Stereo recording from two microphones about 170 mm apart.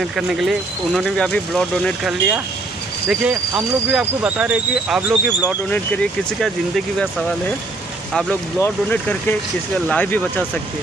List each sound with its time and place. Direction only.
0.0 s speech: centre (ahead or behind)
8.1 s speech: centre (ahead or behind)
8.5 s speech: 15° left (ahead or behind)